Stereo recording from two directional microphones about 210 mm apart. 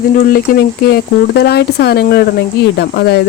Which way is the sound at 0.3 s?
45° left (ahead or behind).